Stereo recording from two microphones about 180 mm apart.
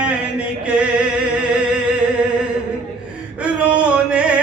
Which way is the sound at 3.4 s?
5° right (ahead or behind).